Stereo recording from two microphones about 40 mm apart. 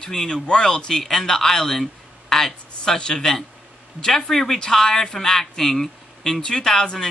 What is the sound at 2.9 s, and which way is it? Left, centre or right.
Speech, centre.